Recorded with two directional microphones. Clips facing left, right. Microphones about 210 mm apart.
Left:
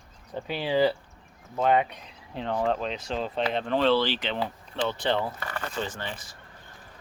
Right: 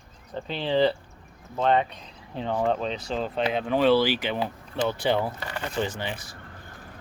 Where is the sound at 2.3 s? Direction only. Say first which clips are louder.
Right 2 dB; centre (ahead or behind).